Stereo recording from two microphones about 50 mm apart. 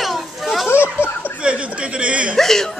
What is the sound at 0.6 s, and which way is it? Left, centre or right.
Speech, left.